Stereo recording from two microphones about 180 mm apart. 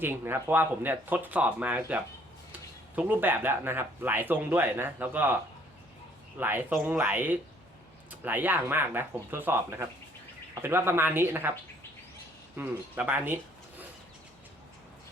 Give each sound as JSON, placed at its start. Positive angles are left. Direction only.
{"t": 0.0, "sound": "speech", "side_deg": -10}
{"t": 6.4, "sound": "speech", "side_deg": -10}
{"t": 12.5, "sound": "speech", "side_deg": -10}